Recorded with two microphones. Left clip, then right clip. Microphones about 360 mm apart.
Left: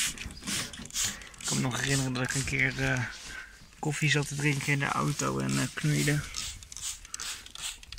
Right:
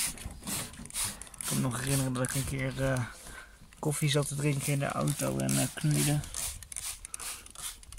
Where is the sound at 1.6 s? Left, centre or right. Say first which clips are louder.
Left 3 dB; centre.